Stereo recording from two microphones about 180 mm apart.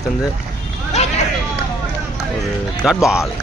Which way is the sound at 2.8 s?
Centre (ahead or behind).